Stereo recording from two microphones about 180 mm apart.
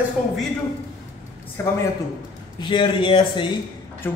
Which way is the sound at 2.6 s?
30° left (ahead or behind).